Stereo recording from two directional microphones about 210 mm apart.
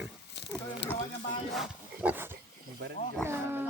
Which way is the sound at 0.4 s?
55° left (ahead or behind).